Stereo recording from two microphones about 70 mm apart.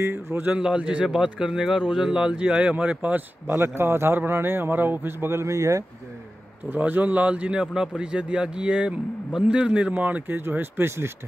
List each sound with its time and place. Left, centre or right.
0.0 s speech: right
0.5 s speech: centre
3.4 s speech: right
6.7 s speech: right